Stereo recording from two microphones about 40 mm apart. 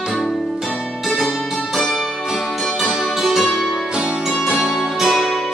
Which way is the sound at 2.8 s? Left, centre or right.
Centre.